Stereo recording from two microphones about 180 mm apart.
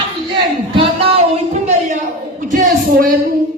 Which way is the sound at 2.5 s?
45° right (ahead or behind).